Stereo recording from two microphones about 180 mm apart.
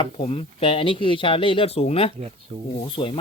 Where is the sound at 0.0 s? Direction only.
30° left (ahead or behind).